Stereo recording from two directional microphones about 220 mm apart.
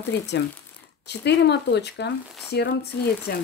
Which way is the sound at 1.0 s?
50° left (ahead or behind).